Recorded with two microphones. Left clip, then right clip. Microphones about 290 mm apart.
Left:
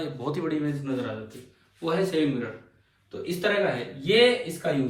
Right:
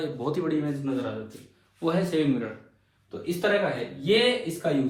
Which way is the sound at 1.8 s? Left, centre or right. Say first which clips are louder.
Even; centre.